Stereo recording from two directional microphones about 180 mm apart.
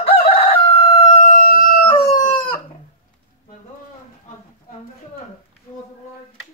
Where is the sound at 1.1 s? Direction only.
40° left (ahead or behind).